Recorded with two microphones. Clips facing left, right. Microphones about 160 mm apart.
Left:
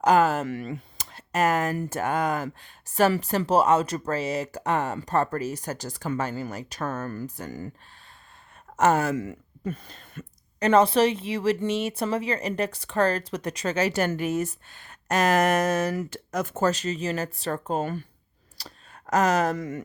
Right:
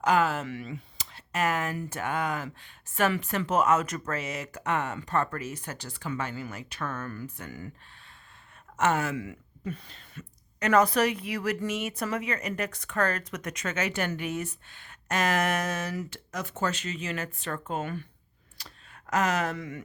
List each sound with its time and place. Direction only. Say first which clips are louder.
0.0 s speech: left 5 dB; 40° left (ahead or behind)
8.7 s speech: left 5 dB; 40° left (ahead or behind)
10.7 s speech: left 4 dB; 30° left (ahead or behind)